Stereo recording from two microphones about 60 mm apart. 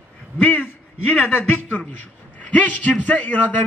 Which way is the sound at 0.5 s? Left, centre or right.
Left.